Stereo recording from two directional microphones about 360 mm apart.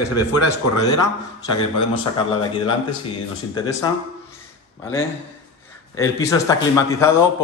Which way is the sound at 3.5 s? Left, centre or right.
Centre.